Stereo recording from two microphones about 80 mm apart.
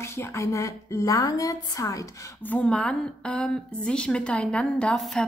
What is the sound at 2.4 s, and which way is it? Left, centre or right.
A woman's voice, centre.